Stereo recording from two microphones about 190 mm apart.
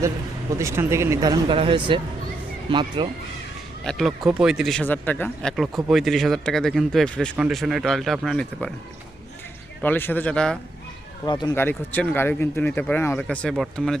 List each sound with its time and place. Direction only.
0.6 s speech: 15° right (ahead or behind)
3.8 s speech: centre (ahead or behind)
9.8 s speech: 10° left (ahead or behind)
11.3 s speech: 25° left (ahead or behind)
11.5 s speech: 10° left (ahead or behind)